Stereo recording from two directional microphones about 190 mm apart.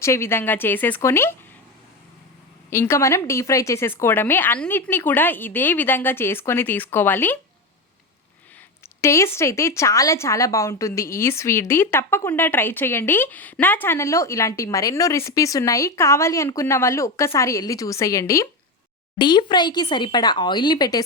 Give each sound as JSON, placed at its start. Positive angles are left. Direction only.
{"t": 0.0, "sound": "speech", "side_deg": 15}
{"t": 2.6, "sound": "speech", "side_deg": 15}
{"t": 9.0, "sound": "speech", "side_deg": 15}